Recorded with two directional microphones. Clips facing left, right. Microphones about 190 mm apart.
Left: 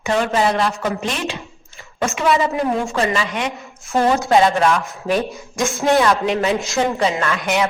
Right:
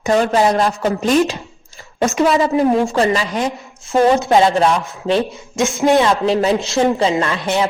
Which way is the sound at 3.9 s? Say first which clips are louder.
Right 3 dB; 20° right (ahead or behind).